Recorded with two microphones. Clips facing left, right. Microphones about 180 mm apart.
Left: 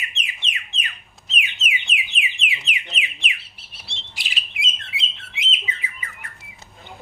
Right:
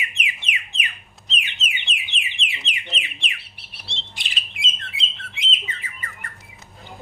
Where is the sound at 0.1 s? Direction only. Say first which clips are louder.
Right 3 dB; 10° right (ahead or behind).